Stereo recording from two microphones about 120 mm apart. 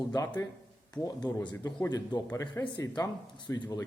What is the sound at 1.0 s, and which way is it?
A man's voice, 30° left (ahead or behind).